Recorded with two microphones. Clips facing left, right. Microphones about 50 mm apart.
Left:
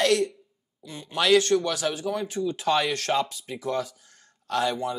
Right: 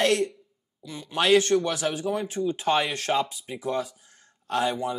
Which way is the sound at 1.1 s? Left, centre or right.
Right.